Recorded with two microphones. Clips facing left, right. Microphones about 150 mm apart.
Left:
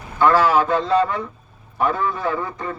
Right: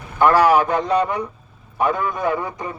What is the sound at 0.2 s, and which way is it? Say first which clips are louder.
A man's voice: right 2 dB; 15° right (ahead or behind).